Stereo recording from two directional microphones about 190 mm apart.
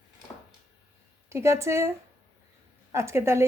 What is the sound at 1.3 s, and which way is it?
Speech, 15° right (ahead or behind).